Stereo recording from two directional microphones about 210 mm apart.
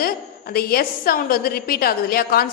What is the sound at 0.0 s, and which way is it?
A woman's voice, 45° left (ahead or behind).